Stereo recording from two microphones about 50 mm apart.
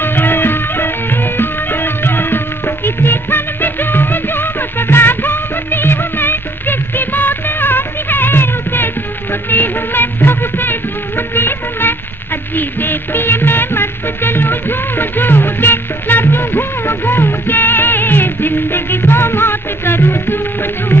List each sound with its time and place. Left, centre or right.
0.0 s music: left